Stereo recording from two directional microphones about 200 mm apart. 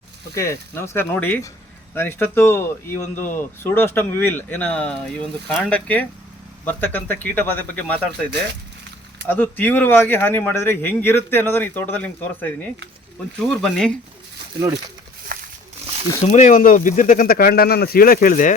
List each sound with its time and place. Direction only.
0.3 s speech: 15° left (ahead or behind)
9.2 s speech: 10° left (ahead or behind)
15.3 s a sound: 45° right (ahead or behind)
16.2 s speech: 35° left (ahead or behind)